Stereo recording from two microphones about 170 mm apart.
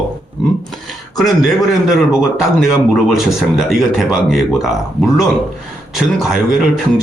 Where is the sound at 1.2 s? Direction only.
Centre (ahead or behind).